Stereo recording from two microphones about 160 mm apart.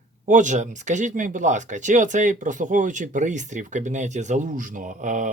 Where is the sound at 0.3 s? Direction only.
50° right (ahead or behind).